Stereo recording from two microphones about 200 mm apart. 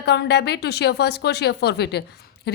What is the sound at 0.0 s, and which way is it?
A woman's voice, 55° left (ahead or behind).